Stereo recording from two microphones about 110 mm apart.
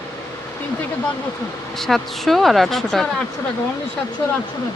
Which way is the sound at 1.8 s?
5° left (ahead or behind).